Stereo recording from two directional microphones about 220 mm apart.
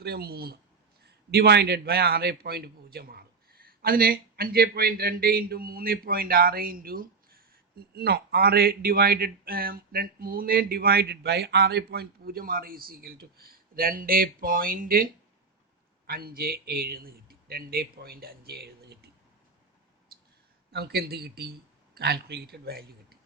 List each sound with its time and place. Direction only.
0.0 s speech: 45° right (ahead or behind)
20.1 s a sound: 40° right (ahead or behind)
20.7 s speech: 45° right (ahead or behind)